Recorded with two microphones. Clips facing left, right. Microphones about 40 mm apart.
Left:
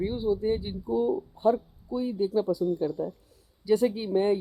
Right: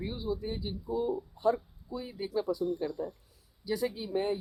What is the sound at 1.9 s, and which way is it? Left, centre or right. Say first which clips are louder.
Speech: left 8 dB; centre.